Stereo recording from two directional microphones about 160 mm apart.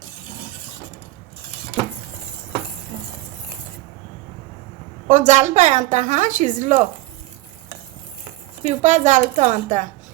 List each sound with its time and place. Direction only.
5.0 s a woman's voice: 50° right (ahead or behind)
8.6 s a woman's voice: 50° right (ahead or behind)